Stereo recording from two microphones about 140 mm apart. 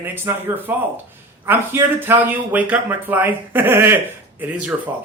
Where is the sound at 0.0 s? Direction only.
15° right (ahead or behind).